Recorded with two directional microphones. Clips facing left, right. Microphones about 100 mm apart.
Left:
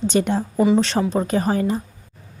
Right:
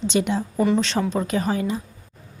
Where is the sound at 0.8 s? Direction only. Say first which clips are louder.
Left 3 dB; 40° left (ahead or behind).